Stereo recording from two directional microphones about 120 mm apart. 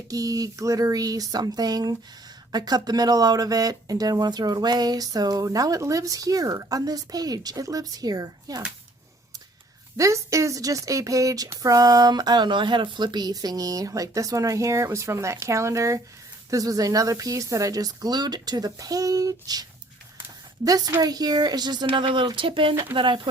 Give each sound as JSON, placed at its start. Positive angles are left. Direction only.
{"t": 0.1, "sound": "speech", "side_deg": -30}
{"t": 10.0, "sound": "speech", "side_deg": -25}
{"t": 20.7, "sound": "speech", "side_deg": -30}